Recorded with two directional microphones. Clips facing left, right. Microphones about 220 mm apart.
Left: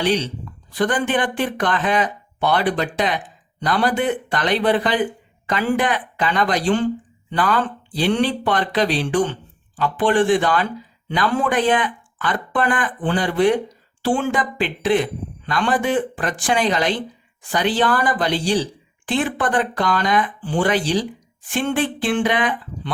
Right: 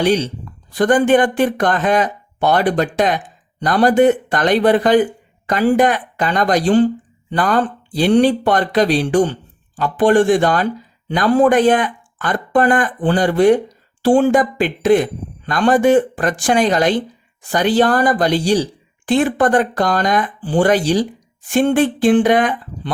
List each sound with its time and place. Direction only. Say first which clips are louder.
0.0 s speech: right 4 dB; 45° right (ahead or behind)